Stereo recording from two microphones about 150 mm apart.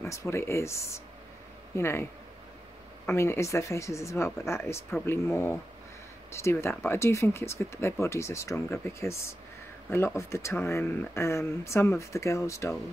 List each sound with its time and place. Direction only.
0.0 s speech: 20° left (ahead or behind)
3.1 s speech: 15° left (ahead or behind)
9.8 s speech: 20° left (ahead or behind)